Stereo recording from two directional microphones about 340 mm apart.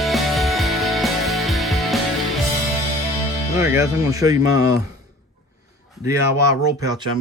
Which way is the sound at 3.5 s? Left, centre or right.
Centre.